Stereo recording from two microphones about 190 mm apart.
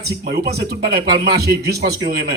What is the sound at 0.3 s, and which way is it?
A man's voice, 55° right (ahead or behind).